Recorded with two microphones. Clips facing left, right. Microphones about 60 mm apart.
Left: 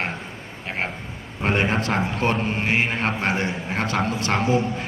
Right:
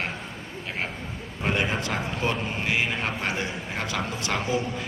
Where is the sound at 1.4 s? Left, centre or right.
Left.